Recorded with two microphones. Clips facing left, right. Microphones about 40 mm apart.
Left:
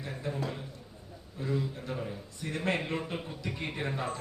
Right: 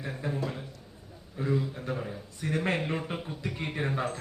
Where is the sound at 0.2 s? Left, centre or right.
Centre.